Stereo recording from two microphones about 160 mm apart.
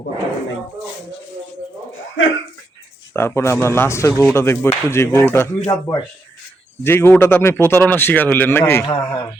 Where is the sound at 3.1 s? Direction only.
15° left (ahead or behind).